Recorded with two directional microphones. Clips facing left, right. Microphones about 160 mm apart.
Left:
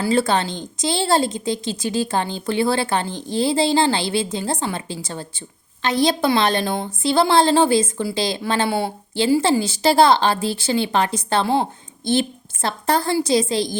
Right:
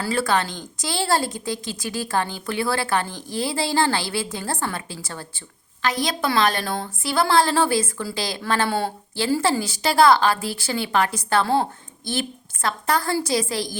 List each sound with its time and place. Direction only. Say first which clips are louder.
0.0 s a woman's voice: left 4 dB; 25° left (ahead or behind)